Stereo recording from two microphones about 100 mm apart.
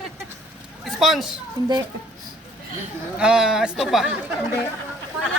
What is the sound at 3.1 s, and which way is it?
Speech, 10° right (ahead or behind).